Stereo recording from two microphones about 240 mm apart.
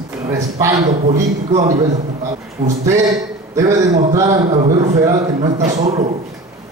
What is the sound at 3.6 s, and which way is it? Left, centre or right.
Speech, centre.